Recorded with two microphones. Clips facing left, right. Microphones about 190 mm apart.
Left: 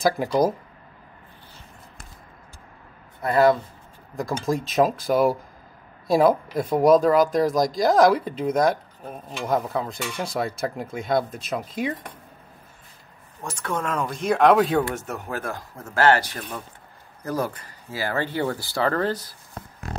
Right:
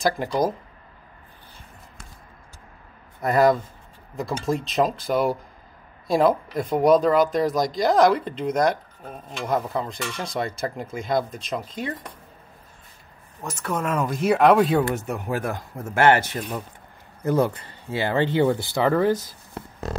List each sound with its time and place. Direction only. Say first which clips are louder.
0.2 s speech: left 2 dB; 10° left (ahead or behind)
4.2 s speech: even; centre (ahead or behind)
13.4 s speech: right 1 dB; 5° right (ahead or behind)
15.0 s speech: right 4 dB; 15° right (ahead or behind)
16.3 s speech: right 4 dB; 10° right (ahead or behind)
17.2 s speech: right 6 dB; 25° right (ahead or behind)